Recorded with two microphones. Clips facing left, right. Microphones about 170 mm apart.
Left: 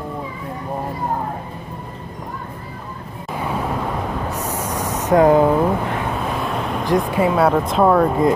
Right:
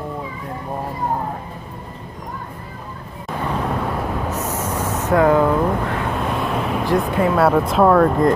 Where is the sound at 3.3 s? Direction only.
10° left (ahead or behind).